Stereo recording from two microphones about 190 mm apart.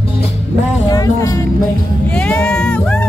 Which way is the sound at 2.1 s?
5° left (ahead or behind).